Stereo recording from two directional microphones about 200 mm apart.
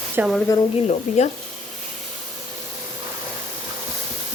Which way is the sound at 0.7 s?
35° left (ahead or behind).